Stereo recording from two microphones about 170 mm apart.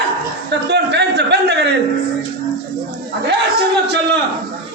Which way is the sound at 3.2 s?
90° right.